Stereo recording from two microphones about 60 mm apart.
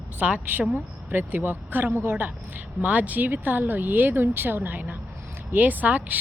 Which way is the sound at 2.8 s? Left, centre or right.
Right.